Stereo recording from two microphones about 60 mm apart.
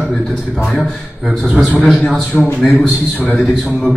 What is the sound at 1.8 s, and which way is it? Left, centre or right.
Speech, centre.